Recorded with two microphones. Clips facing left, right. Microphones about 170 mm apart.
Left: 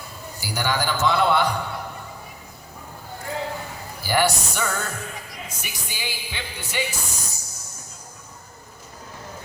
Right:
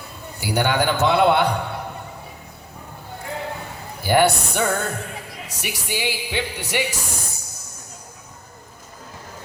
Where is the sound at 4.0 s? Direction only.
55° right (ahead or behind).